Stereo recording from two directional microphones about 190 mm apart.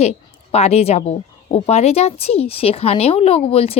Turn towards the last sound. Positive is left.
turn(degrees=30)  # may be behind; listen again after turning